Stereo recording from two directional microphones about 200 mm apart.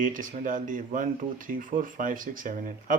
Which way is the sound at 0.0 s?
40° right (ahead or behind).